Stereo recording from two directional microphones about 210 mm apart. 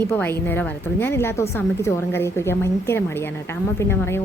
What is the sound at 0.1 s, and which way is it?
A woman's voice, 10° left (ahead or behind).